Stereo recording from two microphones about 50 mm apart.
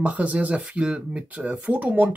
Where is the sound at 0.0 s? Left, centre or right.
Right.